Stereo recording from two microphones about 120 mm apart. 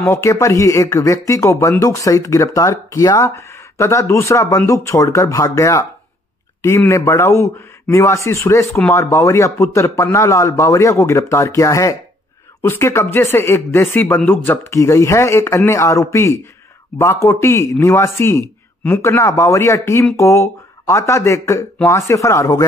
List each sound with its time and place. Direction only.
0.0 s speech: 25° left (ahead or behind)
6.9 s speech: 25° left (ahead or behind)